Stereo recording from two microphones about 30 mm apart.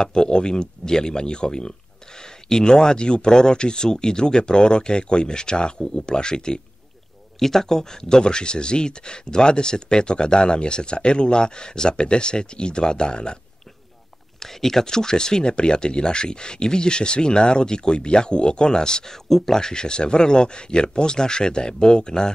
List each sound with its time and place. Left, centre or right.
0.0 s speech: left
7.3 s speech: centre; by 13.4 s left
14.4 s speech: centre
19.2 s speech: centre